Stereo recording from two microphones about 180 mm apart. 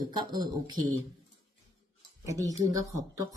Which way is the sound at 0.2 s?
25° right (ahead or behind).